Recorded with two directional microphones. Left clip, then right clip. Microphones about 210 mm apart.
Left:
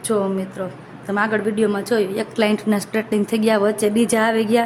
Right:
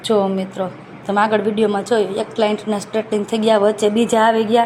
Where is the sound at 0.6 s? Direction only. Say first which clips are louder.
Right 4 dB; centre (ahead or behind).